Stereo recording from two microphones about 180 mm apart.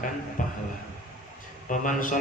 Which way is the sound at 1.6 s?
45° left (ahead or behind).